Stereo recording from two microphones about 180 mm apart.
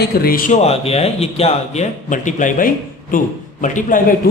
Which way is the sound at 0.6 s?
35° left (ahead or behind).